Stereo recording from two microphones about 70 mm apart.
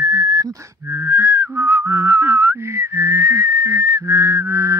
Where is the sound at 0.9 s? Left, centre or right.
Right.